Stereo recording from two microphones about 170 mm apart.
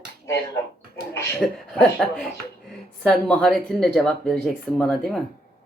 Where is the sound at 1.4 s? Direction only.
5° left (ahead or behind).